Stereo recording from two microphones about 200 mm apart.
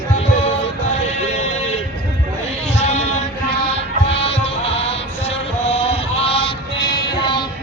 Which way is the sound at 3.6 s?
30° left (ahead or behind).